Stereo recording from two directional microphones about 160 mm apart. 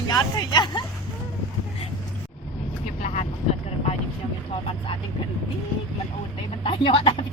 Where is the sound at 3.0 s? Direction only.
45° left (ahead or behind).